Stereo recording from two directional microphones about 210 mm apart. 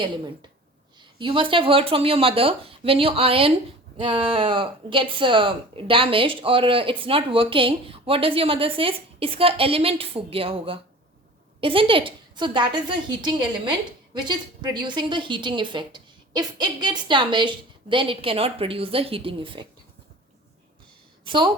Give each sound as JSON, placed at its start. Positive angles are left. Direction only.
{"t": 0.9, "sound": "speech", "side_deg": -25}
{"t": 21.2, "sound": "a woman's voice", "side_deg": -20}